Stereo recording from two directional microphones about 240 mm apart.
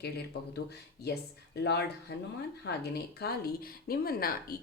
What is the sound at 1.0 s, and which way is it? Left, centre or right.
Speech, left.